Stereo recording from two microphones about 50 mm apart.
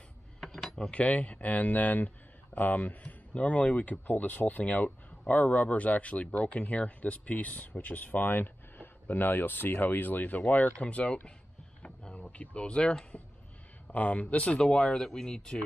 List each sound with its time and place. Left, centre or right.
0.4 s cutlery: centre
0.9 s speech: left
4.1 s speech: left
10.8 s speech: left
11.8 s vehicle: left
13.8 s speech: left; by 15.6 s centre